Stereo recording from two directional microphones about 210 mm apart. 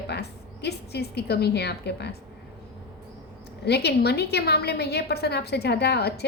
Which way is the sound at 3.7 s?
50° left (ahead or behind).